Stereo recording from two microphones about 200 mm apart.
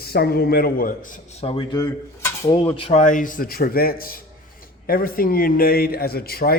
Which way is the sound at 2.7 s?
30° left (ahead or behind).